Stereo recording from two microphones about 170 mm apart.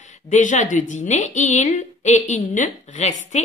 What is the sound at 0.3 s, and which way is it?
A woman's voice, 45° left (ahead or behind).